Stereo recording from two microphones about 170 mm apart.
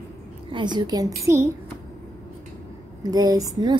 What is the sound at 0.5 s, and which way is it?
A child's voice, 25° right (ahead or behind).